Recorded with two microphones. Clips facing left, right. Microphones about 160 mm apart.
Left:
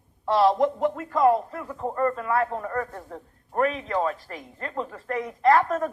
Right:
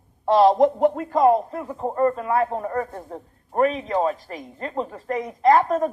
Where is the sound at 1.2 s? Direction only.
20° right (ahead or behind).